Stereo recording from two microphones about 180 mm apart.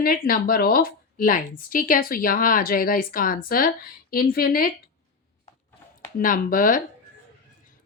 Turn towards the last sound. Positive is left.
turn(degrees=50)  # may be behind; listen again after turning